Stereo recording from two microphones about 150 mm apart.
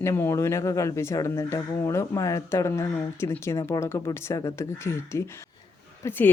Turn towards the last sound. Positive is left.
turn(degrees=20)  # may be behind; listen again after turning